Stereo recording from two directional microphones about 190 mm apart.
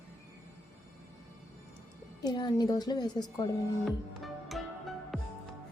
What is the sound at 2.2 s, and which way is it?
Speech, 20° left (ahead or behind).